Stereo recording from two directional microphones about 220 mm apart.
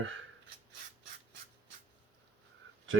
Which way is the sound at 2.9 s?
65° right (ahead or behind).